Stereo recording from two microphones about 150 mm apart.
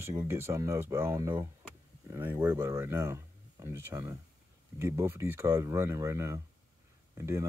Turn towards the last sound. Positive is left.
turn(degrees=-20)  # may be behind; listen again after turning